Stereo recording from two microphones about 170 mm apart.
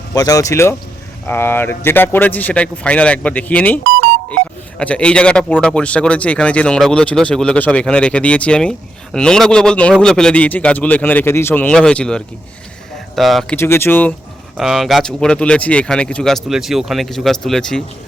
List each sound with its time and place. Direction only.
0.1 s speech: 20° left (ahead or behind)
4.8 s speech: 5° left (ahead or behind)
13.6 s speech: 15° left (ahead or behind)
14.5 s speech: centre (ahead or behind)